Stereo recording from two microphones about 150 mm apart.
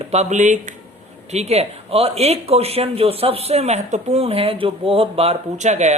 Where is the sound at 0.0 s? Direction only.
50° right (ahead or behind).